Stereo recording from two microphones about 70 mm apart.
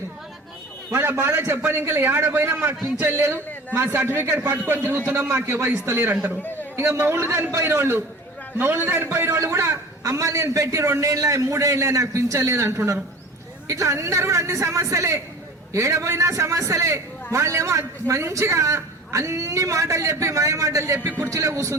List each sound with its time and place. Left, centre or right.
0.9 s a man's voice: right
3.3 s a sound: left
3.8 s a man's voice: right
6.4 s a sound: left
6.7 s a man's voice: right
10.0 s a man's voice: right